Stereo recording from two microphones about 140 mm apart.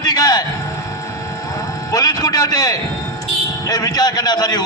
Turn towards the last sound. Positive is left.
turn(degrees=30)  # may be behind; listen again after turning